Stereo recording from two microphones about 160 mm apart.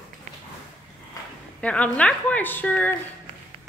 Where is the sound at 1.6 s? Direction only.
10° left (ahead or behind).